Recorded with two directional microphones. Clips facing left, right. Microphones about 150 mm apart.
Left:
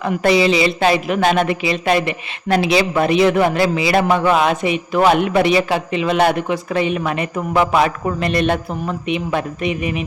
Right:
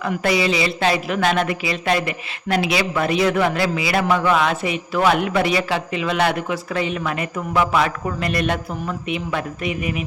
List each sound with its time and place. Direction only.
0.3 s speech: 25° left (ahead or behind)